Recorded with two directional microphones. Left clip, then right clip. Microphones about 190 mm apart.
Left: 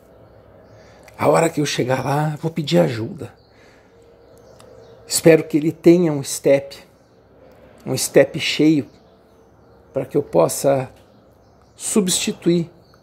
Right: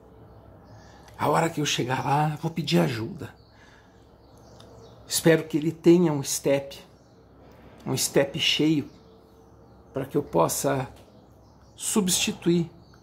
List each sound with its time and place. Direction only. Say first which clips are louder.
1.0 s speech: left 8 dB; 30° left (ahead or behind)
5.0 s speech: left 8 dB; 25° left (ahead or behind)
7.9 s speech: left 9 dB; 20° left (ahead or behind)
9.9 s speech: left 7 dB; 20° left (ahead or behind)